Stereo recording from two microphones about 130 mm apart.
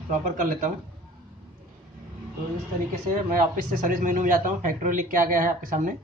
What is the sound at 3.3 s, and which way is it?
Speech, 90° right.